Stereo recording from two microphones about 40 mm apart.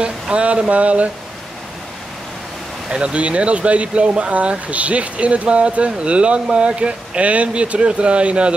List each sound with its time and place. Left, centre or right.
0.0 s speech: right
2.9 s speech: right